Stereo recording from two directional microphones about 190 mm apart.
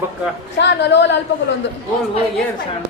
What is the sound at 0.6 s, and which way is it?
Speech, 65° left (ahead or behind).